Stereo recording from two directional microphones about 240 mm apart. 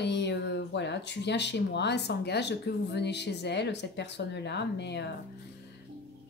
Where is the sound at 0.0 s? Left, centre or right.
Left.